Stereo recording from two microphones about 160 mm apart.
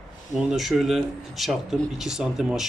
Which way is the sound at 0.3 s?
Centre (ahead or behind).